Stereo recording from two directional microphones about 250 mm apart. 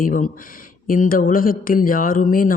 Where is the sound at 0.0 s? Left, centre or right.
Left.